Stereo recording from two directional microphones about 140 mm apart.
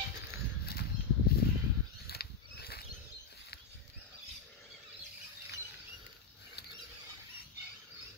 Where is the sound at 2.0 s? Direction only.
90° left.